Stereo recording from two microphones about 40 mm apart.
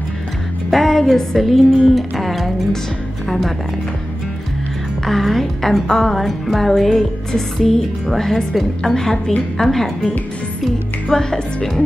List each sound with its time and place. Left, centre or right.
0.7 s speech: centre
5.0 s a woman's voice: centre
11.1 s a woman's voice: centre